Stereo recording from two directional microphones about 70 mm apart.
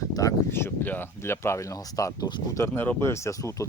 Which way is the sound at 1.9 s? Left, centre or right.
Left.